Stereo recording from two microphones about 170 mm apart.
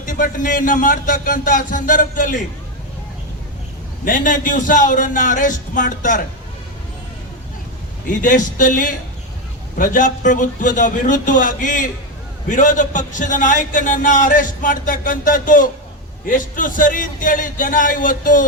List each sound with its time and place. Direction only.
0.0 s a man's voice: 50° left (ahead or behind)
4.0 s a man's voice: 50° left (ahead or behind)
8.0 s a man's voice: 50° left (ahead or behind)